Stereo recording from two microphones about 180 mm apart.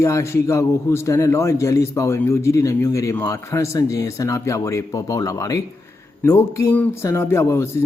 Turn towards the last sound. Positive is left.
turn(degrees=15)  # may be behind; listen again after turning